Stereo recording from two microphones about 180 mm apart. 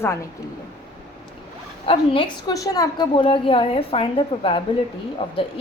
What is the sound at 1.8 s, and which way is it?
A woman's voice, 30° left (ahead or behind).